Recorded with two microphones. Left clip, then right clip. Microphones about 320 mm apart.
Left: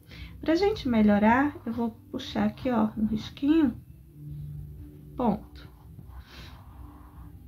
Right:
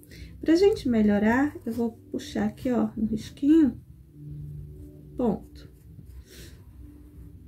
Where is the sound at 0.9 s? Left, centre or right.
Left.